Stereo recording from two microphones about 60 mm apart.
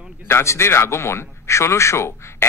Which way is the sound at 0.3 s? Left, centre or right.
Left.